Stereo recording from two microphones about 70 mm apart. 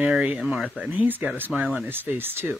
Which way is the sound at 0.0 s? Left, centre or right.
Centre.